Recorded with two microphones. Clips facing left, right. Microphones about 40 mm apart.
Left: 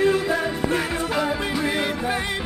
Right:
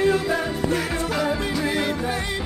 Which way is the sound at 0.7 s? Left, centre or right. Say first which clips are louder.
Left 1 dB; centre.